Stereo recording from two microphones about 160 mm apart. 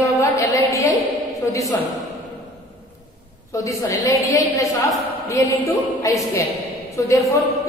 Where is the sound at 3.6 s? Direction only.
20° left (ahead or behind).